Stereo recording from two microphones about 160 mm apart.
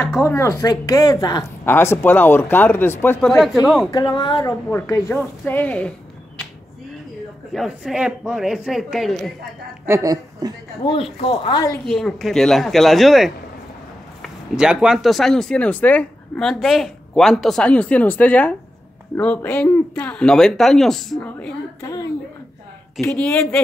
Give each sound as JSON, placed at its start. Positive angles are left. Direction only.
{"t": 0.2, "sound": "speech", "side_deg": 15}
{"t": 3.3, "sound": "speech", "side_deg": 0}
{"t": 3.9, "sound": "a woman's voice", "side_deg": 25}
{"t": 5.4, "sound": "speech", "side_deg": 10}
{"t": 7.5, "sound": "speech", "side_deg": 0}
{"t": 9.8, "sound": "a woman's voice", "side_deg": -20}
{"t": 10.8, "sound": "speech", "side_deg": 35}
{"t": 11.8, "sound": "speech", "side_deg": 0}
{"t": 21.8, "sound": "a woman's voice", "side_deg": 20}